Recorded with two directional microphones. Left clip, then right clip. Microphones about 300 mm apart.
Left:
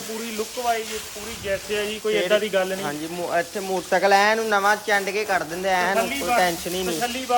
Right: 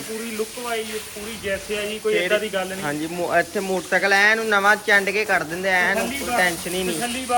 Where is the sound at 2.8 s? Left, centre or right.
Centre.